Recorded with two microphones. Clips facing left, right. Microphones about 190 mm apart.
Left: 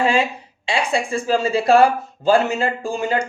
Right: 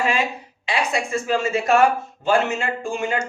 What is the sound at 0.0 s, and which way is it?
Speech, 30° left (ahead or behind).